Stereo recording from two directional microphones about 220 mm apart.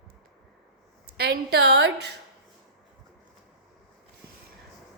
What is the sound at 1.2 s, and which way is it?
Speech, 50° right (ahead or behind).